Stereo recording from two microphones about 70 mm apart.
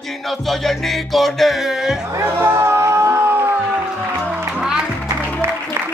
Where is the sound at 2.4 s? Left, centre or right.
Right.